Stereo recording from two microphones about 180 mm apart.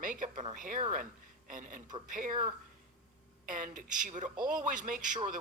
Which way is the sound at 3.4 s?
45° right (ahead or behind).